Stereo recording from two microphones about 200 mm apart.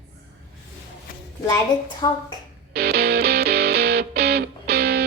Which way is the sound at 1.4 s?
20° left (ahead or behind).